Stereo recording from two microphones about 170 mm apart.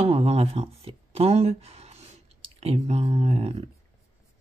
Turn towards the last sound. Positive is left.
turn(degrees=-35)  # may be behind; listen again after turning